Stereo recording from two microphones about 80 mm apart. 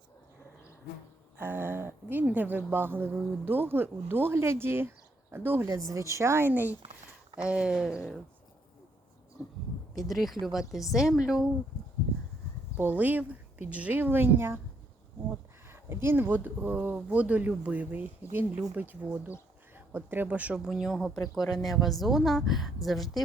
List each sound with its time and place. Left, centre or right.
1.4 s a woman's voice: right
5.9 s a woman's voice: right
6.5 s speech: right
10.0 s a woman's voice: centre
12.7 s speech: centre
15.7 s speech: right
20.7 s a woman's voice: centre
21.1 s speech: left
21.6 s a woman's voice: centre